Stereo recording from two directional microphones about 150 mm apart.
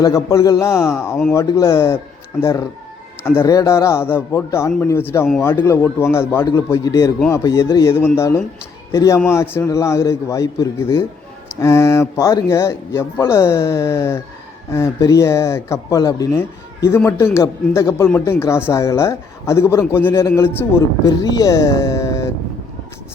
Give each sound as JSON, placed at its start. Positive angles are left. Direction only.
{"t": 0.0, "sound": "a man's voice", "side_deg": 20}
{"t": 3.2, "sound": "a man's voice", "side_deg": 20}